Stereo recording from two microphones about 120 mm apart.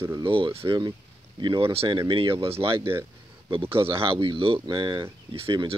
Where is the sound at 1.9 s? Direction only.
40° right (ahead or behind).